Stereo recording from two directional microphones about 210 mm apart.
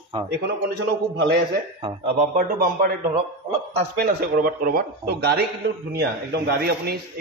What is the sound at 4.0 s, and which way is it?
A man's voice, 50° right (ahead or behind).